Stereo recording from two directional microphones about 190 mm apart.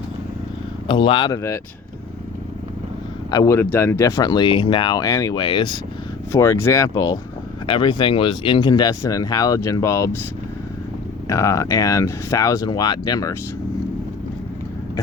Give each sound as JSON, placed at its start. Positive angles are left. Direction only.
{"t": 0.9, "sound": "speech", "side_deg": 25}
{"t": 3.3, "sound": "speech", "side_deg": 15}
{"t": 6.3, "sound": "speech", "side_deg": 15}
{"t": 11.3, "sound": "speech", "side_deg": 15}